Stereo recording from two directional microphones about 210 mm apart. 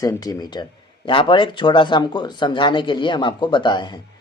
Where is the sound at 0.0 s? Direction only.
15° left (ahead or behind).